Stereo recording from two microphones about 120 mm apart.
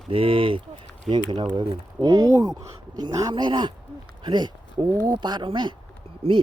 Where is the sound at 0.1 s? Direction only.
50° right (ahead or behind).